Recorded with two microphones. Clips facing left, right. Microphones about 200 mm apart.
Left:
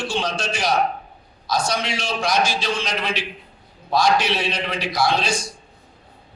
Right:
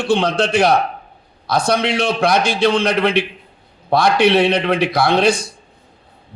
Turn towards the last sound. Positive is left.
turn(degrees=-60)  # may be behind; listen again after turning